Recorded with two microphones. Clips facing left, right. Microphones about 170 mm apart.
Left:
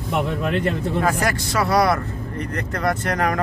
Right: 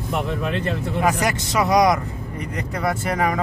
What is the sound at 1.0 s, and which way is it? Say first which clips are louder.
Speech: right 3 dB; 15° right (ahead or behind).